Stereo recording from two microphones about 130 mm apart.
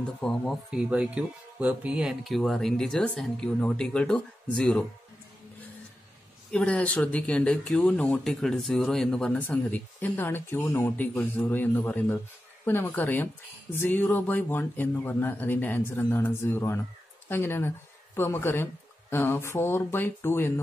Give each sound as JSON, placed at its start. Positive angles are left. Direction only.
{"t": 0.2, "sound": "speech", "side_deg": 5}
{"t": 0.7, "sound": "speech", "side_deg": -5}
{"t": 6.5, "sound": "speech", "side_deg": 10}